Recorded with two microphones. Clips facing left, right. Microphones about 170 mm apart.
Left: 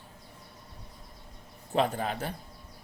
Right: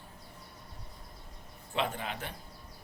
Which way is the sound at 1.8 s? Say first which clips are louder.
Left 6 dB; 40° left (ahead or behind).